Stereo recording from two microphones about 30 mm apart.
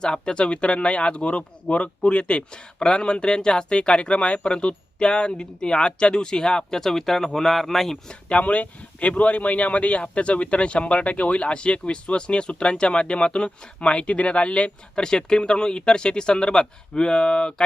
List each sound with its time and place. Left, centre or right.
0.0 s speech: left
6.7 s speech: centre
8.3 s speech: left
14.9 s speech: left